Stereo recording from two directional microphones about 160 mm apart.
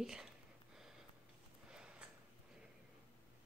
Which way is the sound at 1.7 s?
5° right (ahead or behind).